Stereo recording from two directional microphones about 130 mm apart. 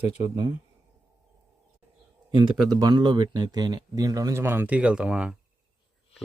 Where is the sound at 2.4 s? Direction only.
35° right (ahead or behind); by 5.4 s 5° right (ahead or behind).